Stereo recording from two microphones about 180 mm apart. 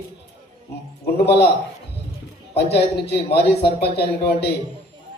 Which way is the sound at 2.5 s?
65° left (ahead or behind).